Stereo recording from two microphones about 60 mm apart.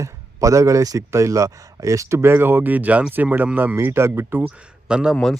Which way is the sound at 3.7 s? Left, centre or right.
Right.